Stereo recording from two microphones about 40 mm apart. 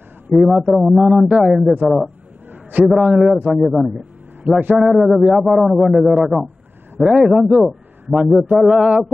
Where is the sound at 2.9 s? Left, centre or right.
Centre.